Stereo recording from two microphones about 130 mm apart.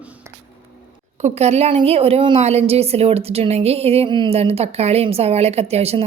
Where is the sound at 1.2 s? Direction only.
55° right (ahead or behind).